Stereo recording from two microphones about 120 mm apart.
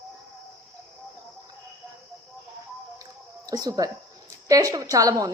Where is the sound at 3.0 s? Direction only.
30° right (ahead or behind).